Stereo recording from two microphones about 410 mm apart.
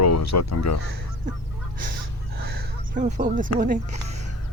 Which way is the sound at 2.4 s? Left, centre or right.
Right.